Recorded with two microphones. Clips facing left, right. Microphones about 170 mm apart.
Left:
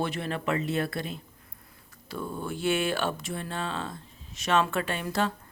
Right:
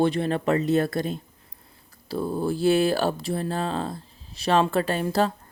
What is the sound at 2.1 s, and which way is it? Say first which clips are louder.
Speech: right 8 dB; 35° right (ahead or behind).